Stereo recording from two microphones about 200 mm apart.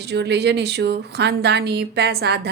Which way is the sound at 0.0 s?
55° right (ahead or behind).